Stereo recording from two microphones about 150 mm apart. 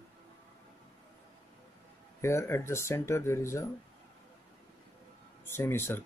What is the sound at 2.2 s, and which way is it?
Speech, 20° left (ahead or behind).